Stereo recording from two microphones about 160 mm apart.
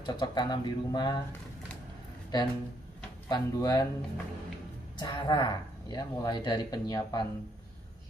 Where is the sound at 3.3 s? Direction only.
25° left (ahead or behind).